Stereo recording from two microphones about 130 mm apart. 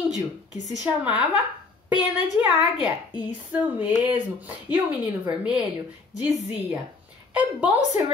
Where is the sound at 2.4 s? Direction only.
15° right (ahead or behind).